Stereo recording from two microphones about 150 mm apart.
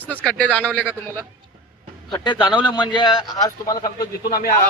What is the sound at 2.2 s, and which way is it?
A man's voice, 30° left (ahead or behind).